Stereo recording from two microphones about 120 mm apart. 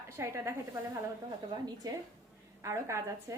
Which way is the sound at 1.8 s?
35° right (ahead or behind).